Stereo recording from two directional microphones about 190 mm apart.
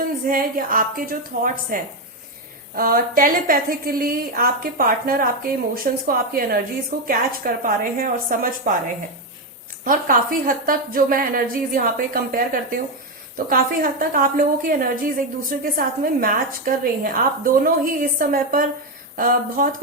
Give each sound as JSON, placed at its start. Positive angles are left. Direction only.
{"t": 0.3, "sound": "a woman's voice", "side_deg": -45}
{"t": 9.8, "sound": "a woman's voice", "side_deg": -45}